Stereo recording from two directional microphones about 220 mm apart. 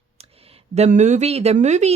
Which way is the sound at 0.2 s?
25° right (ahead or behind).